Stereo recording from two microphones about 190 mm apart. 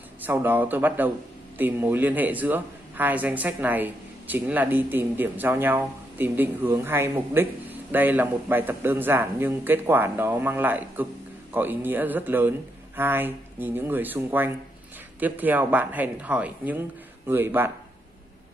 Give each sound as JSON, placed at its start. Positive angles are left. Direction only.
{"t": 0.2, "sound": "speech", "side_deg": -10}